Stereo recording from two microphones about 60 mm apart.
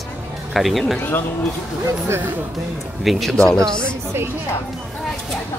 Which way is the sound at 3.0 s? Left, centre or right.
Centre.